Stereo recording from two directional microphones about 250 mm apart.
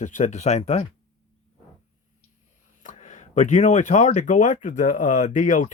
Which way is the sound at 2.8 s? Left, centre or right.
Left.